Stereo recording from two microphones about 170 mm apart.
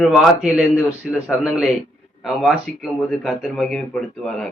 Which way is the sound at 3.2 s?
Centre (ahead or behind).